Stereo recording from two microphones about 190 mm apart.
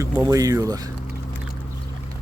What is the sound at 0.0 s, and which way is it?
Speech, 15° right (ahead or behind).